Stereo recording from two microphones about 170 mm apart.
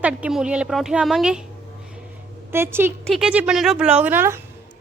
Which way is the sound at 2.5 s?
15° right (ahead or behind).